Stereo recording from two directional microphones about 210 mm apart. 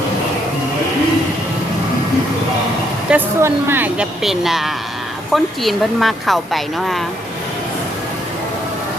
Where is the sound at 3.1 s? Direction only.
10° right (ahead or behind).